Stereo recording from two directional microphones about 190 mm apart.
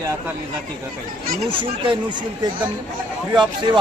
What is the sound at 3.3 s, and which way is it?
Speech, 25° right (ahead or behind).